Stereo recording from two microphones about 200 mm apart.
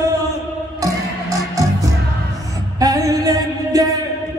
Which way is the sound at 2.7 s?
15° right (ahead or behind).